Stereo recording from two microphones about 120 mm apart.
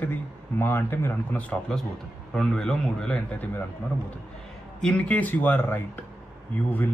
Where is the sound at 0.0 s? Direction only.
15° left (ahead or behind).